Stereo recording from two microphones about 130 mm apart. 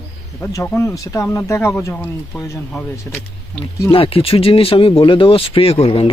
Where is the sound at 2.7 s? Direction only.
10° left (ahead or behind).